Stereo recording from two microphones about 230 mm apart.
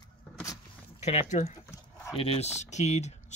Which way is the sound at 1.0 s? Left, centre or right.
Left.